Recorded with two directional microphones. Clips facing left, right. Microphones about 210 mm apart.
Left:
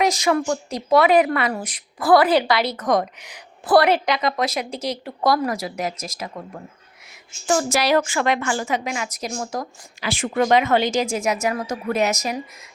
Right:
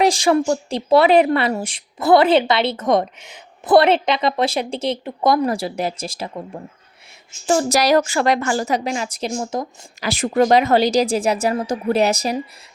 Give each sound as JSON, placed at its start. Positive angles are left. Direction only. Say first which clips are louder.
{"t": 0.0, "sound": "speech", "louder": "right 4 dB", "side_deg": -30}
{"t": 10.0, "sound": "speech", "louder": "right 4 dB", "side_deg": -40}